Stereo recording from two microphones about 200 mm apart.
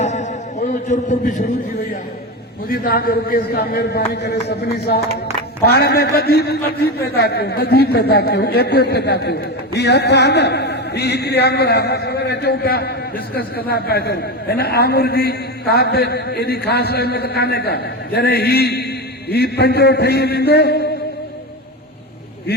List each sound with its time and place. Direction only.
0.0 s a sound: 35° left (ahead or behind)
0.9 s a man's voice: 35° left (ahead or behind)
2.6 s a man's voice: 50° left (ahead or behind)